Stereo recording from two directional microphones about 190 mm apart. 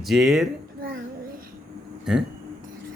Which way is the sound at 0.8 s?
50° right (ahead or behind).